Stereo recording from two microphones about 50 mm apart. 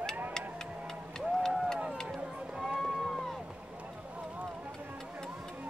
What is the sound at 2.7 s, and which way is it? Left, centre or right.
Music, centre.